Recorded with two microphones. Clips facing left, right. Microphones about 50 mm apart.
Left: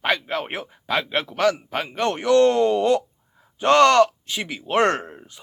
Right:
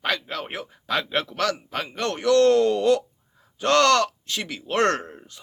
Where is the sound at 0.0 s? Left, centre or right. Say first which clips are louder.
Left 4 dB; left.